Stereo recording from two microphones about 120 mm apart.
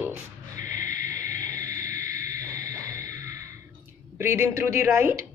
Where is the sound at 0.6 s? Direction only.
90° left.